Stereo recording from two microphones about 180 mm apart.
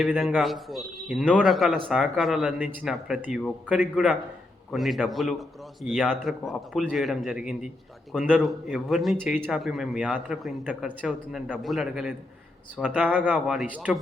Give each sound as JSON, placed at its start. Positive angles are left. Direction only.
{"t": 0.0, "sound": "a man's voice", "side_deg": -5}